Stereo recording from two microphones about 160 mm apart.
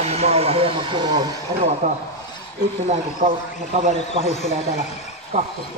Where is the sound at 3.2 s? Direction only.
45° right (ahead or behind).